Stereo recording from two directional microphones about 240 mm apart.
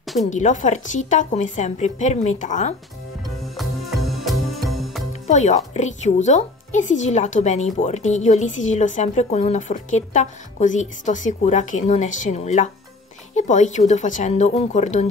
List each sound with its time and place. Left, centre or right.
0.3 s a woman's voice: left
3.5 s music: centre
5.2 s a woman's voice: left